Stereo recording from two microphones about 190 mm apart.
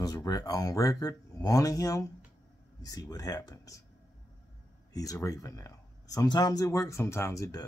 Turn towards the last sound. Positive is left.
turn(degrees=15)  # may be behind; listen again after turning